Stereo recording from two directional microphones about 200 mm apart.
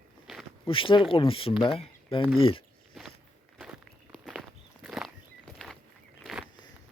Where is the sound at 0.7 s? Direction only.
25° left (ahead or behind).